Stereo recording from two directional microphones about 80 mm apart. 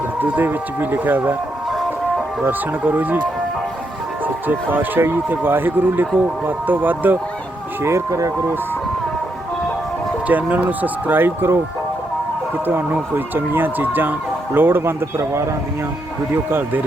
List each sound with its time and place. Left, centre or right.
0.2 s speech: right
2.4 s speech: right
4.4 s speech: right
7.8 s speech: right
10.2 s speech: centre
12.6 s speech: right